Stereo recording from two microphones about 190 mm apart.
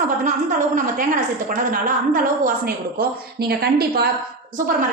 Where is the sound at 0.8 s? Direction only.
45° right (ahead or behind).